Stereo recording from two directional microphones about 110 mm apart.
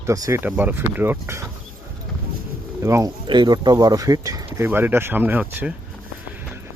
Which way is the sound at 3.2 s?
40° right (ahead or behind).